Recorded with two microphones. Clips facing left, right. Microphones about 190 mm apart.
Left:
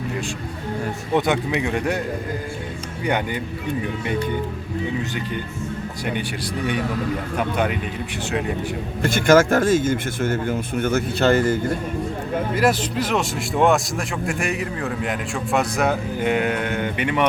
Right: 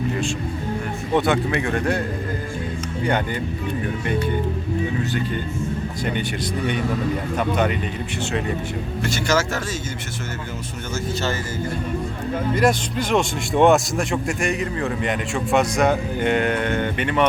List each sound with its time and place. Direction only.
1.1 s a man's voice: 15° left (ahead or behind)
7.3 s a man's voice: 10° left (ahead or behind)
9.0 s speech: 55° left (ahead or behind)
12.5 s speech: 5° left (ahead or behind)